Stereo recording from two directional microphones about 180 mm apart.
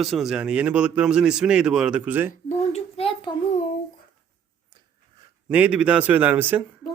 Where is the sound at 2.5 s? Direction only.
35° left (ahead or behind).